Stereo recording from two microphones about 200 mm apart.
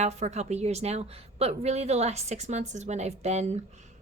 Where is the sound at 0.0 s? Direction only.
35° right (ahead or behind).